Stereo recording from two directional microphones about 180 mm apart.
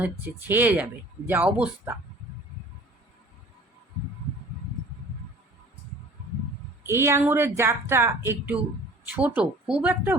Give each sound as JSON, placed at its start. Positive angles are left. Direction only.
{"t": 0.0, "sound": "a woman's voice", "side_deg": -10}
{"t": 6.8, "sound": "a woman's voice", "side_deg": -15}